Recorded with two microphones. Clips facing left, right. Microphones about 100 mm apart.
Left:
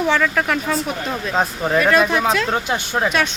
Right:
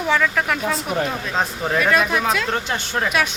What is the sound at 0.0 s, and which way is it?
Speech, centre (ahead or behind).